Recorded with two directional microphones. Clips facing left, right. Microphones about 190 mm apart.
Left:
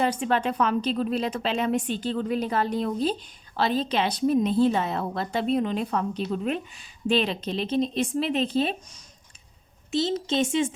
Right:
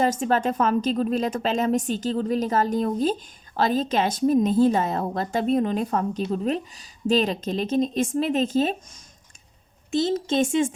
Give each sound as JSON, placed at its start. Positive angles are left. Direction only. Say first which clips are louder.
{"t": 0.0, "sound": "a woman's voice", "louder": "right 2 dB", "side_deg": -40}
{"t": 9.9, "sound": "a woman's voice", "louder": "right 3 dB", "side_deg": -50}